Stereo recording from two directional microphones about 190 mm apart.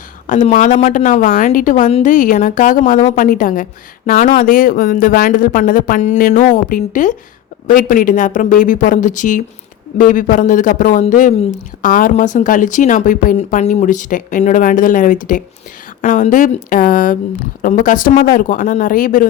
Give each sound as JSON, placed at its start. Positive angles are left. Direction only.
{"t": 0.3, "sound": "a woman's voice", "side_deg": 40}